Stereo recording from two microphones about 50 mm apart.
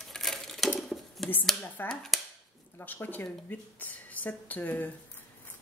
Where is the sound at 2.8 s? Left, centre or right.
Left.